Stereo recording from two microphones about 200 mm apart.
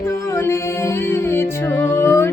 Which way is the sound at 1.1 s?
10° left (ahead or behind).